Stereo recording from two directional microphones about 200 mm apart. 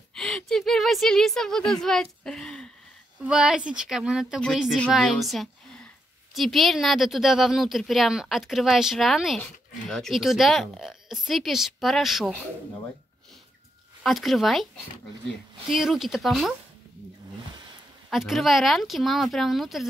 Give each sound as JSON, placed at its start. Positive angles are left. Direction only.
{"t": 0.1, "sound": "a sound", "side_deg": 5}
{"t": 1.7, "sound": "speech", "side_deg": 0}
{"t": 14.0, "sound": "speech", "side_deg": 0}
{"t": 15.7, "sound": "speech", "side_deg": 0}
{"t": 18.1, "sound": "speech", "side_deg": 0}